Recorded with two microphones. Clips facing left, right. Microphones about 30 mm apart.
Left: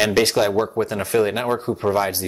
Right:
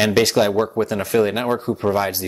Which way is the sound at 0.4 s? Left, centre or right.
Centre.